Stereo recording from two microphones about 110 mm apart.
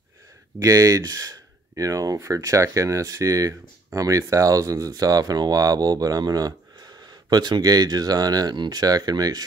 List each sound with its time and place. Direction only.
0.6 s speech: 30° right (ahead or behind)